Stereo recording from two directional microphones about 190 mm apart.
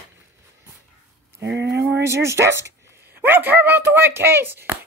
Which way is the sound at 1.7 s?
15° right (ahead or behind).